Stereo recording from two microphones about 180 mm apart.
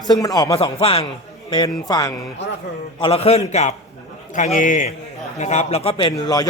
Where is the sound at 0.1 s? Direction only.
20° left (ahead or behind).